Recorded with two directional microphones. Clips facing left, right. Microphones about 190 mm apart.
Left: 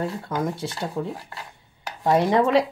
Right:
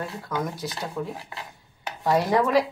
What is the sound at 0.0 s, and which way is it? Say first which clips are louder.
Speech: left 4 dB; 25° left (ahead or behind).